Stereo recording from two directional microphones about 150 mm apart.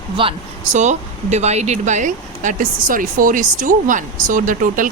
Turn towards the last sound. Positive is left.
turn(degrees=-60)  # may be behind; listen again after turning